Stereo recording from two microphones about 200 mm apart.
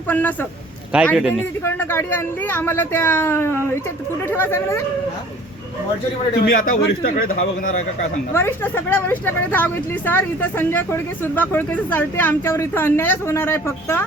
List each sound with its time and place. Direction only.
0.1 s speech: 10° left (ahead or behind)
6.4 s a man's voice: 45° left (ahead or behind)
8.3 s speech: 10° left (ahead or behind)